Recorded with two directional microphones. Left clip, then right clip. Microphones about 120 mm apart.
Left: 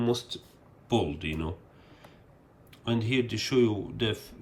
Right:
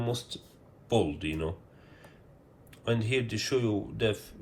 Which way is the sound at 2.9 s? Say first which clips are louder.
Left 1 dB; 45° left (ahead or behind).